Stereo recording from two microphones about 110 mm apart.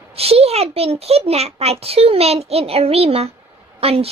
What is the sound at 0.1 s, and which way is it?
A child's voice, 65° right (ahead or behind).